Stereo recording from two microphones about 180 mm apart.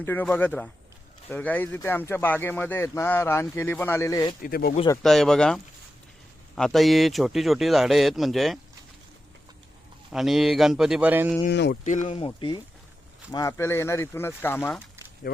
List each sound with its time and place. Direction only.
0.0 s speech: 10° left (ahead or behind)
4.4 s speech: 55° left (ahead or behind)
5.0 s a man's voice: centre (ahead or behind)
6.6 s a man's voice: centre (ahead or behind)
10.1 s a man's voice: centre (ahead or behind)
11.4 s speech: 65° left (ahead or behind)
11.9 s speech: 40° left (ahead or behind)
12.2 s speech: 30° left (ahead or behind)
13.3 s speech: 15° left (ahead or behind)